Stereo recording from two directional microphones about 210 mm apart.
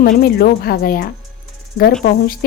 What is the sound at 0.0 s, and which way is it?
A woman's voice, 45° left (ahead or behind).